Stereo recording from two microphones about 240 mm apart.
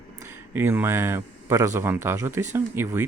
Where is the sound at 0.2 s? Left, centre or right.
Centre.